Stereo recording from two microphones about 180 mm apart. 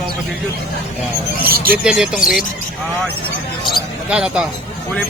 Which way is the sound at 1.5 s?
55° right (ahead or behind).